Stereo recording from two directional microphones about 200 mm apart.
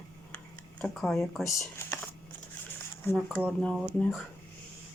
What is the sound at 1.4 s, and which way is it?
Speech, 10° left (ahead or behind).